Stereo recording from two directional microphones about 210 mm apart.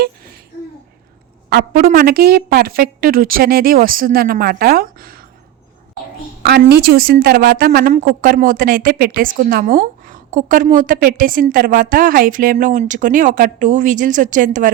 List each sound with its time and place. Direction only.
1.5 s a woman's voice: 45° right (ahead or behind)
6.4 s a woman's voice: 50° right (ahead or behind)